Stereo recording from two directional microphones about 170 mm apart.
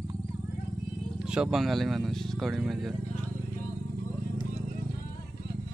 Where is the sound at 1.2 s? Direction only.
5° right (ahead or behind).